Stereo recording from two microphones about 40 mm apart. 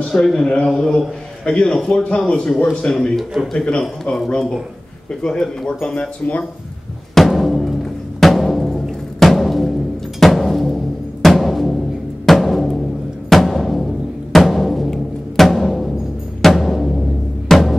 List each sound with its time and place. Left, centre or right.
0.1 s a man's voice: centre
1.4 s a man's voice: left
5.2 s a man's voice: centre
5.7 s a man's voice: left
7.2 s music: centre
11.2 s timpani: centre
12.3 s drum: centre
13.3 s timpani: centre
16.3 s music: centre